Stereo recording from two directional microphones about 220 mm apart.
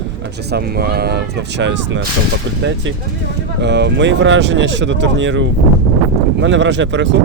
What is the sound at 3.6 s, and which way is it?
Speech, 50° right (ahead or behind).